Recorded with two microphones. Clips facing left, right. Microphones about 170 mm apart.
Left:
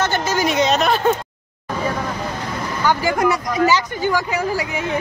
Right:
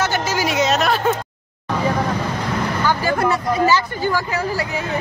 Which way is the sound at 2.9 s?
15° left (ahead or behind).